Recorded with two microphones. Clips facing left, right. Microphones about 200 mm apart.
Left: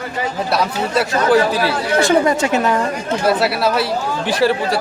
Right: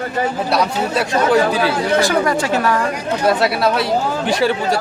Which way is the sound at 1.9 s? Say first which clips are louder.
Left 5 dB; 25° left (ahead or behind).